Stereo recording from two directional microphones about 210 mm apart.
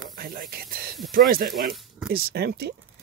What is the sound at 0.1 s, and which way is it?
Speech, 45° right (ahead or behind).